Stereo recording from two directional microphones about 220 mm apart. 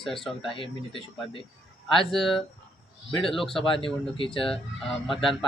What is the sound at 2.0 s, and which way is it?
Speech, centre (ahead or behind).